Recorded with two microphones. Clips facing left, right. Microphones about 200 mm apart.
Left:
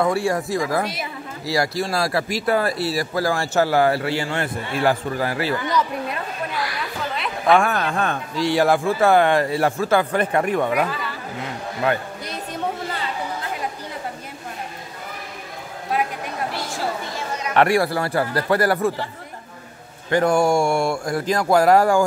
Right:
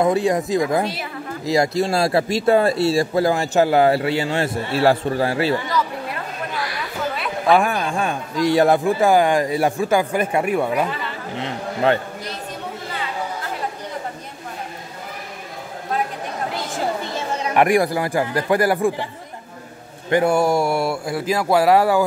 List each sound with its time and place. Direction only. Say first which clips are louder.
0.0 s speech: right 3 dB; 20° right (ahead or behind)
7.2 s a sound: even; 5° right (ahead or behind)
7.6 s a man's voice: even; 15° right (ahead or behind)
10.9 s speech: right 1 dB; 25° right (ahead or behind)
17.6 s a man's voice: right 1 dB; 15° right (ahead or behind)
20.1 s speech: right 1 dB; 15° right (ahead or behind)
20.3 s speech: even; 5° right (ahead or behind)